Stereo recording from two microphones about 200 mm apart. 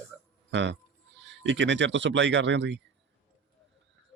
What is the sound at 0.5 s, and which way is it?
Speech, 60° right (ahead or behind).